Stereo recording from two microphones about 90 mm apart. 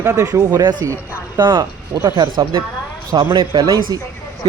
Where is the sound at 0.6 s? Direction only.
55° right (ahead or behind).